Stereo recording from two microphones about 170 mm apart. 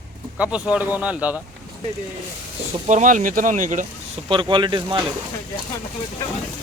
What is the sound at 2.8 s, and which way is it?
Speech, 45° right (ahead or behind).